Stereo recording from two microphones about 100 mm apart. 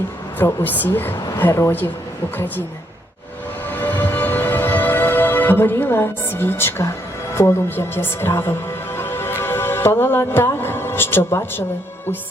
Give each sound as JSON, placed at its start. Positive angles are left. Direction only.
{"t": 0.3, "sound": "a woman's voice", "side_deg": 20}
{"t": 3.7, "sound": "music", "side_deg": 20}
{"t": 7.3, "sound": "a woman's voice", "side_deg": 25}
{"t": 9.0, "sound": "music", "side_deg": 25}